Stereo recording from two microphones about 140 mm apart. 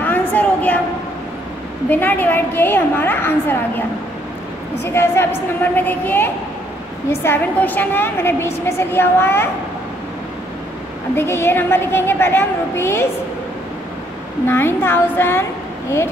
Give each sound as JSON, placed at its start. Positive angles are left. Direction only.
{"t": 0.0, "sound": "a sound", "side_deg": 10}
{"t": 1.9, "sound": "a woman's voice", "side_deg": 15}
{"t": 4.8, "sound": "a woman's voice", "side_deg": 15}
{"t": 11.1, "sound": "a woman's voice", "side_deg": 15}
{"t": 14.4, "sound": "a woman's voice", "side_deg": 15}